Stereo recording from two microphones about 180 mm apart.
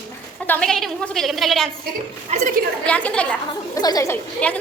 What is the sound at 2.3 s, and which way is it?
Speech, 40° right (ahead or behind).